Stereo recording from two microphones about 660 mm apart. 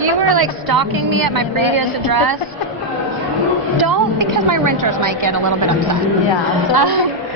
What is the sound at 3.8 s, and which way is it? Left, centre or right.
A woman's voice, right.